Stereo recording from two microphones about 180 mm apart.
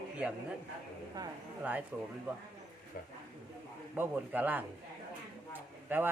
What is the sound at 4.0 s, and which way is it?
Speech, 10° right (ahead or behind).